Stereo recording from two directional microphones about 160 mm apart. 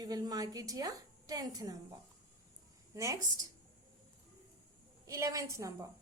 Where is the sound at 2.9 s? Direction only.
20° right (ahead or behind).